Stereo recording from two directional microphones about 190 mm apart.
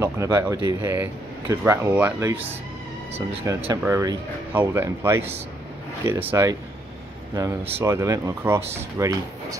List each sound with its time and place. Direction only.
0.0 s speech: 15° right (ahead or behind)
7.8 s speech: 15° right (ahead or behind)